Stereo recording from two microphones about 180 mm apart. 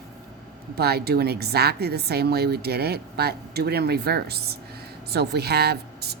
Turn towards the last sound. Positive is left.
turn(degrees=-65)  # may be behind; listen again after turning